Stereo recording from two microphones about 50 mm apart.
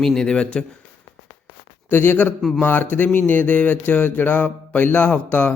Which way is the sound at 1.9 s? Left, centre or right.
Left.